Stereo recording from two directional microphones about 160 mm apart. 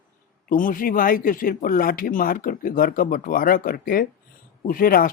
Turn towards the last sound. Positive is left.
turn(degrees=65)  # may be behind; listen again after turning